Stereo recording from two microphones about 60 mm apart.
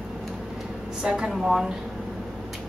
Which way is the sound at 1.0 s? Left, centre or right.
Centre.